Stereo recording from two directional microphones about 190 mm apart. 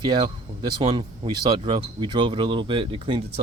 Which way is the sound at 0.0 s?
25° right (ahead or behind).